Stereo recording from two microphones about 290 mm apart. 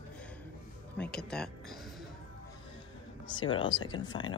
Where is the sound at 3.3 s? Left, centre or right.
Centre.